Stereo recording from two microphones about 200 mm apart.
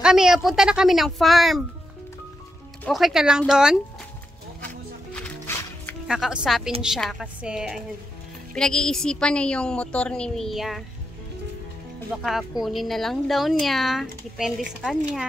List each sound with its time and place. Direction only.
0.0 s speech: 5° right (ahead or behind)
2.8 s speech: centre (ahead or behind)
5.1 s music: 5° left (ahead or behind)
6.0 s speech: 5° right (ahead or behind)
12.1 s speech: centre (ahead or behind)